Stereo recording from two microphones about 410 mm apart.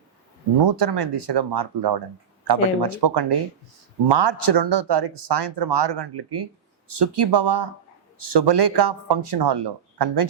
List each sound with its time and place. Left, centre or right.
0.6 s speech: right